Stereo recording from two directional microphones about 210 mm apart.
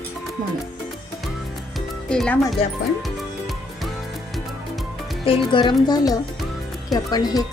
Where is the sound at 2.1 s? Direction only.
5° left (ahead or behind).